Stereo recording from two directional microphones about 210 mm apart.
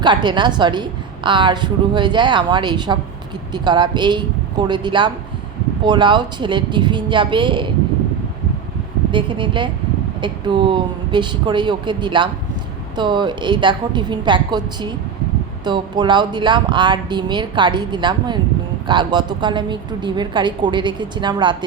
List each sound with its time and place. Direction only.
0.0 s a woman's voice: 20° right (ahead or behind)
9.1 s a woman's voice: 25° right (ahead or behind)